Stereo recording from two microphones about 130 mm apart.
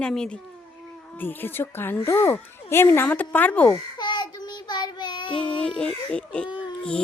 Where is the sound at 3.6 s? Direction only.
30° left (ahead or behind).